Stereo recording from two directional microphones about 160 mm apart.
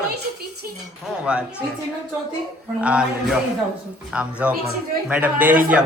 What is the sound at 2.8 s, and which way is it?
A man's voice, 5° right (ahead or behind).